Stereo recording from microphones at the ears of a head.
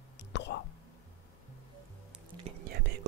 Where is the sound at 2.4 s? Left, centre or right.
Right.